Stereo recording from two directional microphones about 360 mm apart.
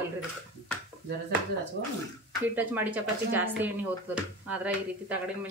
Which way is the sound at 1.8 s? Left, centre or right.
Right.